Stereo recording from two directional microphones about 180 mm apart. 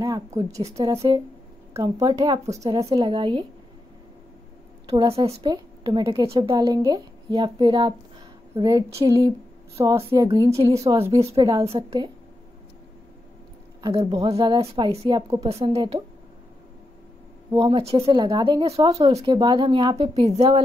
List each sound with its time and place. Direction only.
0.0 s a woman's voice: 15° right (ahead or behind)
2.8 s speech: 35° right (ahead or behind)
4.8 s speech: 30° right (ahead or behind)
6.5 s speech: 20° right (ahead or behind)
10.5 s speech: 35° right (ahead or behind)
11.3 s a woman's voice: 20° right (ahead or behind)
11.6 s speech: 30° right (ahead or behind)
13.8 s speech: 25° right (ahead or behind)
17.5 s speech: 30° right (ahead or behind)